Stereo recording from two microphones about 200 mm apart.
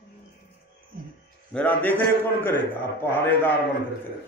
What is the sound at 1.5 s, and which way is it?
A man's voice, 5° left (ahead or behind).